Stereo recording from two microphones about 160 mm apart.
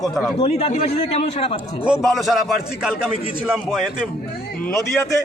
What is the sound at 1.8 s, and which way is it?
A man's voice, 5° right (ahead or behind).